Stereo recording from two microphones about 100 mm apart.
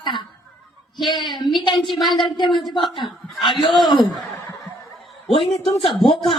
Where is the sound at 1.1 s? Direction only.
50° left (ahead or behind).